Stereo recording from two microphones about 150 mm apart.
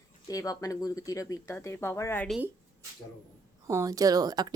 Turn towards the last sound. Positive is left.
turn(degrees=-25)  # may be behind; listen again after turning